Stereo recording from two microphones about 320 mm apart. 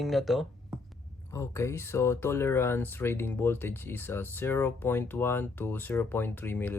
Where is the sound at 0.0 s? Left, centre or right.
Centre.